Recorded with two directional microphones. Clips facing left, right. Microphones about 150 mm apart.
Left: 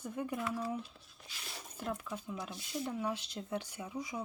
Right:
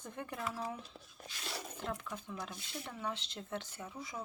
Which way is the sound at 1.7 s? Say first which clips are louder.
Left 5 dB; 10° left (ahead or behind).